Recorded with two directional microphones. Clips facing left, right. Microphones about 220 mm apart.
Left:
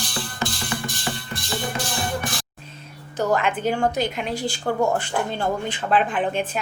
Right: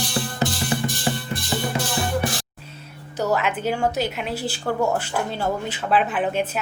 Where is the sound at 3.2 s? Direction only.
5° right (ahead or behind).